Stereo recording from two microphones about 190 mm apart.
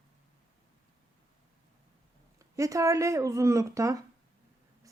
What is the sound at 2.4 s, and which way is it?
A woman's voice, 15° right (ahead or behind).